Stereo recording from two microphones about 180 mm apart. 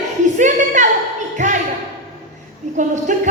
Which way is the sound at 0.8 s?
40° right (ahead or behind).